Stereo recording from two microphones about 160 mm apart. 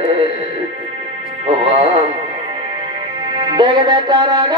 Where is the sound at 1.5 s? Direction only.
40° right (ahead or behind).